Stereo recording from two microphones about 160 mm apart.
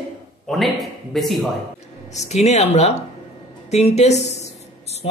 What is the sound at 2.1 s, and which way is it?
Speech, 45° left (ahead or behind).